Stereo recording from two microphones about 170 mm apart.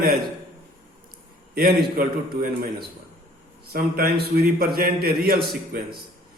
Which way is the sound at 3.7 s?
65° right (ahead or behind).